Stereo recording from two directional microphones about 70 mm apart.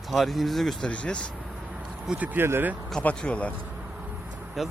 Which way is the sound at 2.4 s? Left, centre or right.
Right.